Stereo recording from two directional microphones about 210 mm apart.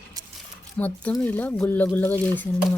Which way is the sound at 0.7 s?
5° left (ahead or behind).